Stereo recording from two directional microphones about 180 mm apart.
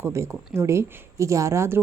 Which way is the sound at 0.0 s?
15° right (ahead or behind).